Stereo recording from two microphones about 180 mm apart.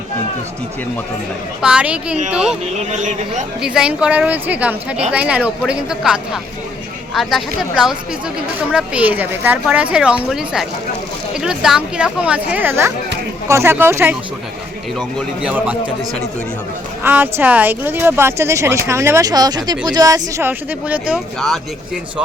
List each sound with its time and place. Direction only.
1.6 s speech: 5° right (ahead or behind)
2.9 s a man's voice: 45° right (ahead or behind)
3.6 s speech: 5° right (ahead or behind)
17.0 s speech: 10° right (ahead or behind)